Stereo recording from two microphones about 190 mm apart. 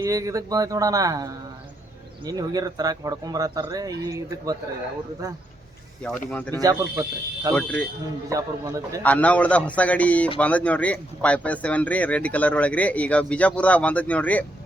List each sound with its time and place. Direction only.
0.0 s a man's voice: 15° right (ahead or behind)
6.0 s speech: 5° left (ahead or behind)
6.6 s a man's voice: 20° right (ahead or behind)
9.0 s speech: 5° left (ahead or behind)